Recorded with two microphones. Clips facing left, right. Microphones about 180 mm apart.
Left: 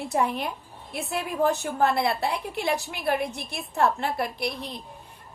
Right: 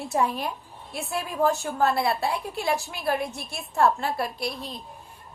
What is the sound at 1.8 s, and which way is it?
A woman's voice, 20° left (ahead or behind).